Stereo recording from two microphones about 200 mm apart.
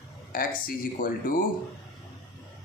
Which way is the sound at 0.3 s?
45° left (ahead or behind).